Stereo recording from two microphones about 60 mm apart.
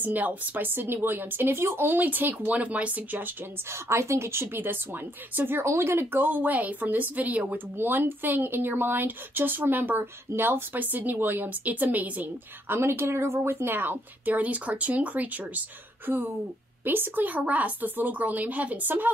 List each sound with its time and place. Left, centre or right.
0.0 s a woman's voice: right
2.0 s a woman's voice: right
3.9 s a woman's voice: right